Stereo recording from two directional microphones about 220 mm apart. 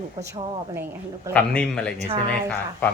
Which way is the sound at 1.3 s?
5° left (ahead or behind).